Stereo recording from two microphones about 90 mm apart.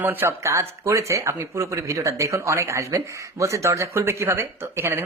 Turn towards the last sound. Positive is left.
turn(degrees=-25)  # may be behind; listen again after turning